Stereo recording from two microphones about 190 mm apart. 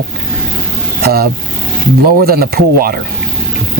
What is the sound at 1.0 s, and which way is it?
Speech, 55° right (ahead or behind).